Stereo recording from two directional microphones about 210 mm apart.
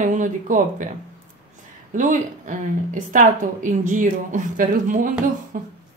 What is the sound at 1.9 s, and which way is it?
A woman's voice, 35° right (ahead or behind).